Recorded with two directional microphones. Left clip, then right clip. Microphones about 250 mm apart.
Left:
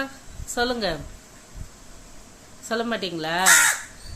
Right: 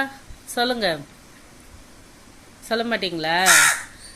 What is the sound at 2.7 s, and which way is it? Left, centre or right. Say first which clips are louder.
Speech: right 3 dB; centre.